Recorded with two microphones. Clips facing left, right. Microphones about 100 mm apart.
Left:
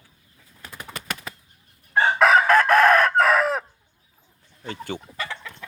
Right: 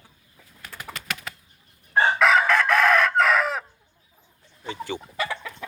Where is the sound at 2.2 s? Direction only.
45° left (ahead or behind).